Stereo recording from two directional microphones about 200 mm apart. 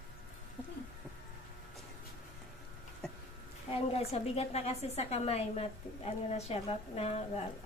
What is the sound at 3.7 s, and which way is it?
A woman's voice, 30° left (ahead or behind).